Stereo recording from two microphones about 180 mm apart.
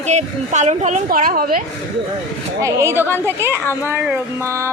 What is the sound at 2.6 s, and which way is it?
Speech, 15° right (ahead or behind).